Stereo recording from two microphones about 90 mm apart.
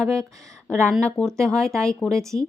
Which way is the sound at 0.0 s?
5° left (ahead or behind).